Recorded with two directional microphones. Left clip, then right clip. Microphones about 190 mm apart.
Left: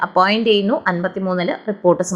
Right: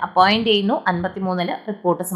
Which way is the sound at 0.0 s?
10° left (ahead or behind).